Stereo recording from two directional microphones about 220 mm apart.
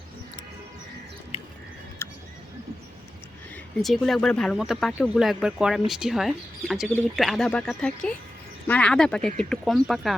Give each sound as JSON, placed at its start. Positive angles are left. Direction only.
{"t": 1.3, "sound": "horse", "side_deg": 25}
{"t": 3.5, "sound": "speech", "side_deg": 0}